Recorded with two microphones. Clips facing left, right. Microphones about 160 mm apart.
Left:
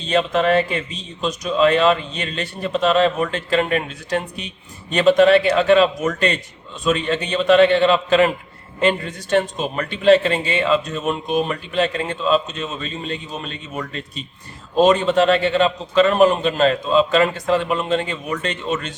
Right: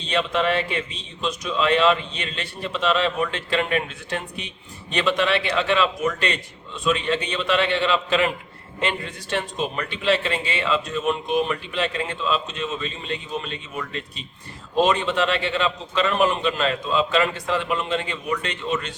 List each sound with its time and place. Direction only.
0.0 s a man's voice: 40° left (ahead or behind)